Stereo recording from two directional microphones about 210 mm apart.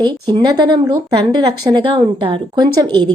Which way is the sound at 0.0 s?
20° right (ahead or behind).